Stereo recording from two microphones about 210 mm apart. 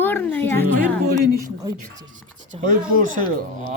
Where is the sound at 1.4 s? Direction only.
15° right (ahead or behind).